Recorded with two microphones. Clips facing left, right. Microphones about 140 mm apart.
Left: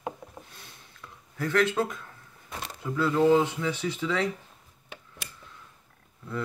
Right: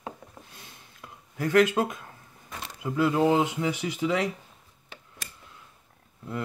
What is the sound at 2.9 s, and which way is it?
Speech, 15° right (ahead or behind).